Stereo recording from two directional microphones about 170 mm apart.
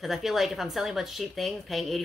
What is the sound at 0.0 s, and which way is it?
Speech, centre (ahead or behind).